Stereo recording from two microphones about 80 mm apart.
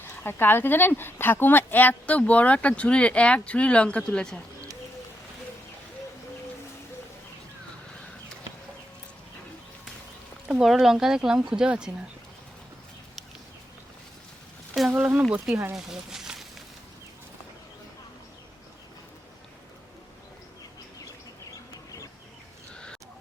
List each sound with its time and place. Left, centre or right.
0.0 s speech: left; by 4.4 s centre
10.5 s speech: centre
14.9 s speech: centre
22.7 s a sound: centre